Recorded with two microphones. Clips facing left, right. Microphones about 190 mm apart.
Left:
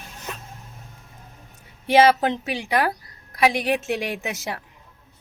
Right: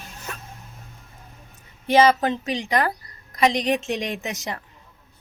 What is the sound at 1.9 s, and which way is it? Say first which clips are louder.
A woman's voice: left 1 dB; 10° left (ahead or behind).